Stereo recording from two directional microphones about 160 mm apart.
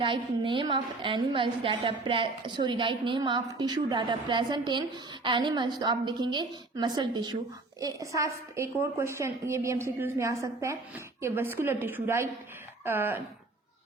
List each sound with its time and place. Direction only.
0.0 s a woman's voice: 30° right (ahead or behind); by 13.2 s 15° right (ahead or behind)